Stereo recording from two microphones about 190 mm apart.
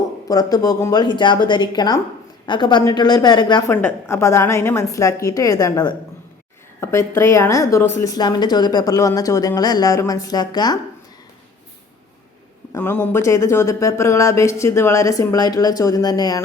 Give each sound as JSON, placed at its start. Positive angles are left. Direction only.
{"t": 0.3, "sound": "a woman's voice", "side_deg": 20}
{"t": 12.7, "sound": "a woman's voice", "side_deg": 10}